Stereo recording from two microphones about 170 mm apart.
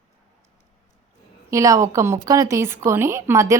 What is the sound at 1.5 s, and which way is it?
A woman's voice, 20° right (ahead or behind).